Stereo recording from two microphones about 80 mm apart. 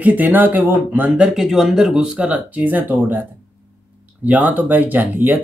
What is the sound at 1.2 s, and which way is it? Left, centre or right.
Speech, centre.